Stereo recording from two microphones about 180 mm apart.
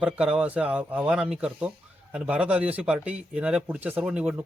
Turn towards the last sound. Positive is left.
turn(degrees=-5)  # may be behind; listen again after turning